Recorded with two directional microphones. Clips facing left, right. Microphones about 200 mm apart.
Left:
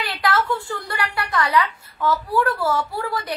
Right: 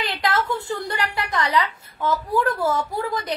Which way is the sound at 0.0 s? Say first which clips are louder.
Left 1 dB; 20° right (ahead or behind).